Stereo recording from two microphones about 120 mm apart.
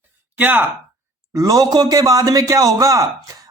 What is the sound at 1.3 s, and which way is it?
Speech, 30° right (ahead or behind).